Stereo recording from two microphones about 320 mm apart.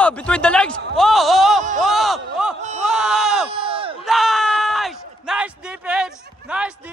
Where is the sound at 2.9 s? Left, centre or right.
Centre.